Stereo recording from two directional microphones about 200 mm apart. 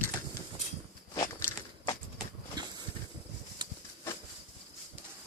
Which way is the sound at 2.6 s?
20° right (ahead or behind).